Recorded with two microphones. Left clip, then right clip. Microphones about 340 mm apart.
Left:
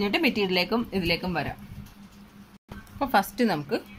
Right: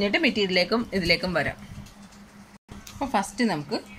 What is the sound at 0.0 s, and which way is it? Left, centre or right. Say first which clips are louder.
Speech: right 2 dB; centre.